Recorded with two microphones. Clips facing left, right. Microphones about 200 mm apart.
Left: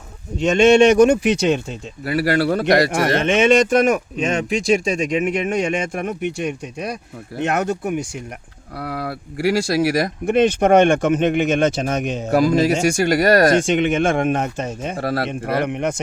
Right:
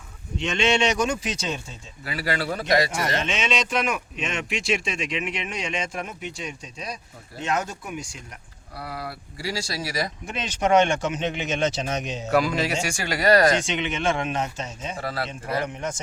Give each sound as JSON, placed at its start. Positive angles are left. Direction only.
{"t": 0.3, "sound": "speech", "side_deg": 45}